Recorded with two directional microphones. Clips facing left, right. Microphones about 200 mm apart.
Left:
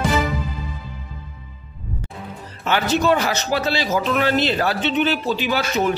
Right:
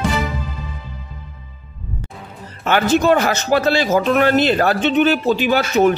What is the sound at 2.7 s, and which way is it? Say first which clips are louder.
A man's voice: right 4 dB; 50° right (ahead or behind).